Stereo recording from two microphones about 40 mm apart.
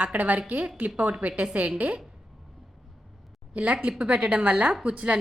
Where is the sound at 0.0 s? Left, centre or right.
Right.